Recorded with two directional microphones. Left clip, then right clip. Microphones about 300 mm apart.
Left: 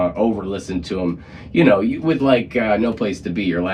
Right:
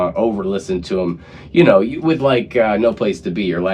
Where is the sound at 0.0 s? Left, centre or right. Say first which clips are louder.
Right 2 dB; centre.